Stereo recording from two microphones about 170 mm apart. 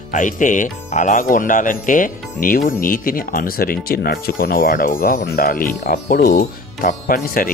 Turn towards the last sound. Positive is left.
turn(degrees=60)  # may be behind; listen again after turning